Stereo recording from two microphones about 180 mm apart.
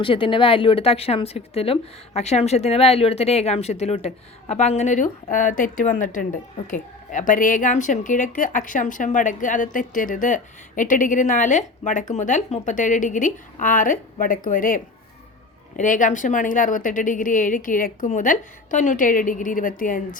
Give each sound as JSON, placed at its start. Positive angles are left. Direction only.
{"t": 0.0, "sound": "speech", "side_deg": 30}